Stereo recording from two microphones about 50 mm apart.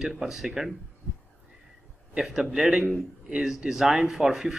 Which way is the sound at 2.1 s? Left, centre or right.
Centre.